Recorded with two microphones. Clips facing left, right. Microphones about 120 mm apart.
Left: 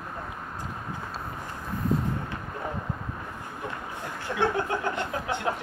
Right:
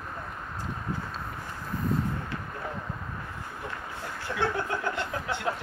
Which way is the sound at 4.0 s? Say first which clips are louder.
Left 3 dB; 20° left (ahead or behind).